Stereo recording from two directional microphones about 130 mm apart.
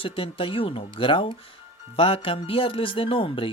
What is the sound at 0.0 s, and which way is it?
Speech, 45° left (ahead or behind).